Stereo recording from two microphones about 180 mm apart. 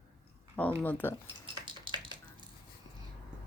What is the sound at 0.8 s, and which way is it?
Speech, 10° left (ahead or behind).